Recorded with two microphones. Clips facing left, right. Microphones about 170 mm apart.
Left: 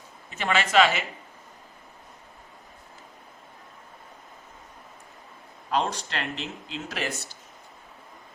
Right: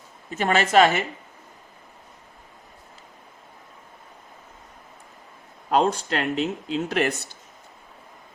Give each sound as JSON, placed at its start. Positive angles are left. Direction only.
{"t": 0.3, "sound": "speech", "side_deg": -45}
{"t": 5.7, "sound": "speech", "side_deg": -45}
{"t": 6.8, "sound": "speech", "side_deg": -55}